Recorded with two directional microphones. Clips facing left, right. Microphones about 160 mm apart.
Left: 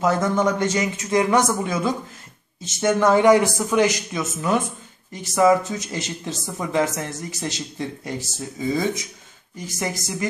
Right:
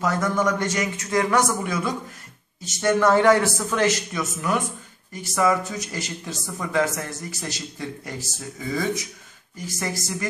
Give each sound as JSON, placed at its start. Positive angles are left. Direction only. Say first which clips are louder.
{"t": 0.0, "sound": "a man's voice", "louder": "left 3 dB", "side_deg": 20}